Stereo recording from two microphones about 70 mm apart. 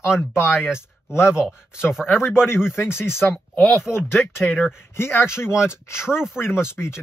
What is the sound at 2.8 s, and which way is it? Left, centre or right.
Speech, left.